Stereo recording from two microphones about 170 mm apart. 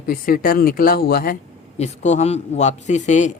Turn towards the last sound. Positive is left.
turn(degrees=45)  # may be behind; listen again after turning